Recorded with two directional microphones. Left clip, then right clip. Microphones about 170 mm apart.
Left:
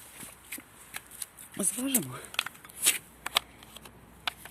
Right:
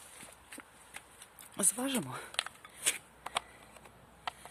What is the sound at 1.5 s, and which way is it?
Speech, 20° right (ahead or behind).